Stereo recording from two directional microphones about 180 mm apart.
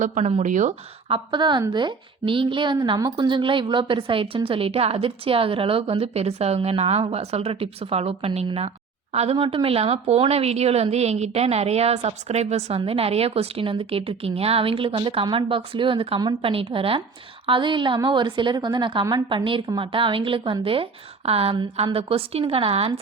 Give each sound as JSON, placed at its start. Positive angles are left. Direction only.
{"t": 0.0, "sound": "a woman's voice", "side_deg": -40}